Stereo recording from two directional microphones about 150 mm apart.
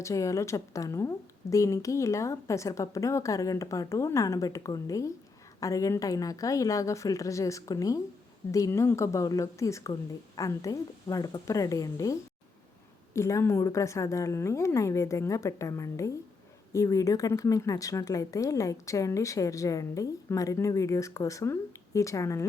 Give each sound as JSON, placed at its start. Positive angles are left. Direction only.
{"t": 0.0, "sound": "a woman's voice", "side_deg": 20}
{"t": 13.1, "sound": "a woman's voice", "side_deg": 20}